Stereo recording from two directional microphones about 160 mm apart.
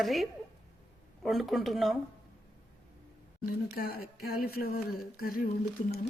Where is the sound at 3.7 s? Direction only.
70° left (ahead or behind).